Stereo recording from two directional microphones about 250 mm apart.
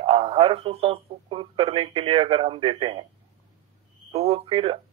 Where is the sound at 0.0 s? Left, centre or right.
Right.